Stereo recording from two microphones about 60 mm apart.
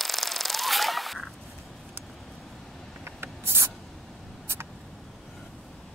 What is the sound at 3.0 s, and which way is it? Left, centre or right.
Writing, right.